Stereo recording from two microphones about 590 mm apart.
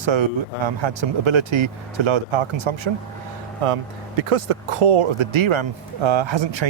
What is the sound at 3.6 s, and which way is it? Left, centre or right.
Speech, right.